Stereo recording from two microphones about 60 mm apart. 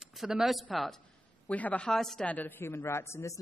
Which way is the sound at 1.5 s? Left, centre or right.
Left.